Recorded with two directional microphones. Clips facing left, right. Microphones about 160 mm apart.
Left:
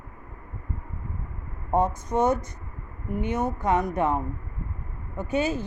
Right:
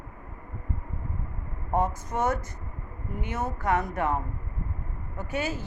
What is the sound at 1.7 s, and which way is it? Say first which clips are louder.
A woman's voice: left 4 dB; 20° left (ahead or behind).